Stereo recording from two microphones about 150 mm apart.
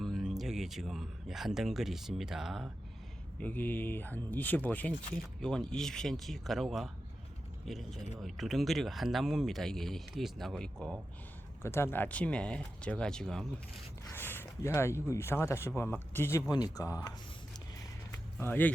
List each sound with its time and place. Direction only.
0.0 s speech: centre (ahead or behind)
3.4 s speech: 10° left (ahead or behind)
11.6 s speech: 15° left (ahead or behind)
14.1 s speech: 15° left (ahead or behind)
16.5 s speech: 25° left (ahead or behind)
18.3 s speech: 15° left (ahead or behind)